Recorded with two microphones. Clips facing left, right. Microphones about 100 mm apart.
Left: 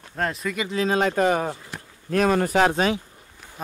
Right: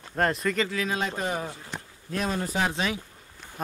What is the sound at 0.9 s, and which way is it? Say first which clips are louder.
Speech: left 12 dB; 65° left (ahead or behind).